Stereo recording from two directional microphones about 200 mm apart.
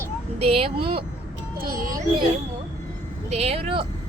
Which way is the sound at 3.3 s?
30° right (ahead or behind).